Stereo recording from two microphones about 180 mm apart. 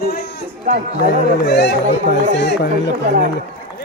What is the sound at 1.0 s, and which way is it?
Speech, 65° left (ahead or behind).